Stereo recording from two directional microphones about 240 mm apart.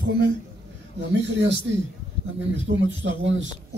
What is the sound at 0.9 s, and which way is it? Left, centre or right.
Speech, right.